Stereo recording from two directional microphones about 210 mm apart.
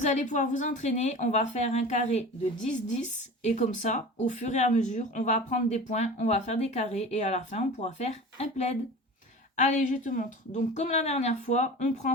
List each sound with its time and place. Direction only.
0.0 s a woman's voice: 35° left (ahead or behind)